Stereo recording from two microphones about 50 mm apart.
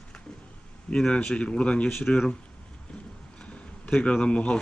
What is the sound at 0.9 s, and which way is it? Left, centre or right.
Speech, centre.